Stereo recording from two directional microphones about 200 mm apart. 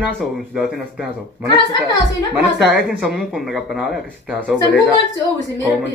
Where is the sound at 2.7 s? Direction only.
5° right (ahead or behind).